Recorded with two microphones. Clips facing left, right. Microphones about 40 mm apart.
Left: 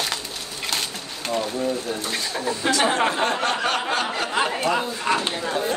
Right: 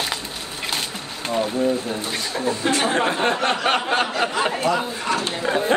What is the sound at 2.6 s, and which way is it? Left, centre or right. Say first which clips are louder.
Speech: right 1 dB; centre.